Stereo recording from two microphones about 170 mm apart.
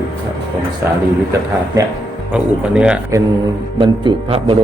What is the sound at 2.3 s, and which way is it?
Speech, 5° right (ahead or behind).